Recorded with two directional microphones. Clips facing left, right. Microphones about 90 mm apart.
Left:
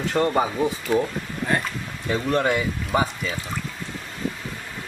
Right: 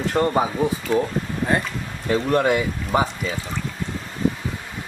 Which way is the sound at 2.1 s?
5° right (ahead or behind).